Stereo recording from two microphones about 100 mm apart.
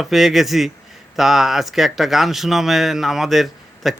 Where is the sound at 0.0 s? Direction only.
Centre (ahead or behind).